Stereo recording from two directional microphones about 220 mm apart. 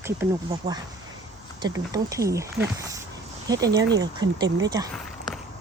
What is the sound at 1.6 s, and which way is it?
Speech, 15° right (ahead or behind).